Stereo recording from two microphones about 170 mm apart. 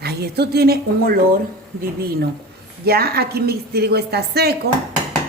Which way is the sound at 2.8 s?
65° right (ahead or behind).